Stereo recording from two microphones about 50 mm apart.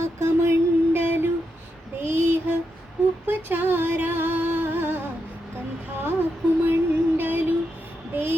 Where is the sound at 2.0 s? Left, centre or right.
Right.